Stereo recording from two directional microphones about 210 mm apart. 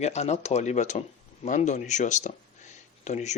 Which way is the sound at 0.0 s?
30° left (ahead or behind).